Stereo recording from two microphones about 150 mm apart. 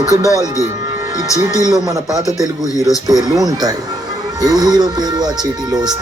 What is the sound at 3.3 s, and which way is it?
Speech, 25° right (ahead or behind).